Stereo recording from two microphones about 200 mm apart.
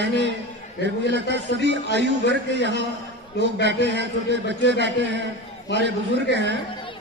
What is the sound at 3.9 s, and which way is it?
A man's voice, 60° right (ahead or behind).